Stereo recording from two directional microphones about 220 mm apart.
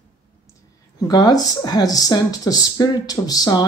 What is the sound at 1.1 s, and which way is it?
Speech, 20° left (ahead or behind).